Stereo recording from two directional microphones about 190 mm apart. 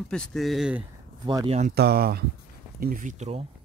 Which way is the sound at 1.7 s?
55° right (ahead or behind).